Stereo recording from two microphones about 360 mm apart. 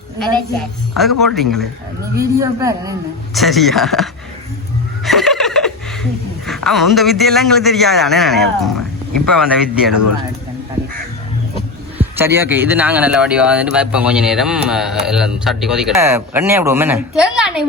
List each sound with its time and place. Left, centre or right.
1.2 s a man's voice: centre
11.9 s speech: centre